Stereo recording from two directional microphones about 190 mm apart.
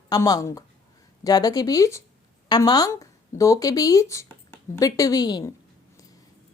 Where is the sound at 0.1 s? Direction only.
20° left (ahead or behind).